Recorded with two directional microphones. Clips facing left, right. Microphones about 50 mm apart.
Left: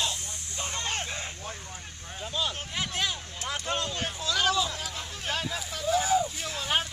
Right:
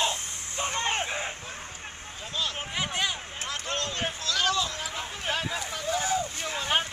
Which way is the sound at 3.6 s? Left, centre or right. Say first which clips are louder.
Left 1 dB; centre.